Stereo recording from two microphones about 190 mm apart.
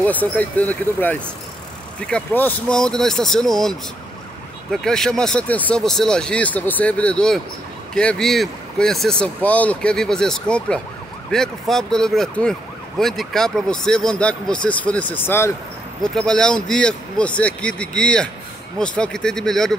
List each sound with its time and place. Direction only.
0.0 s speech: 10° left (ahead or behind)
4.8 s speech: 5° left (ahead or behind)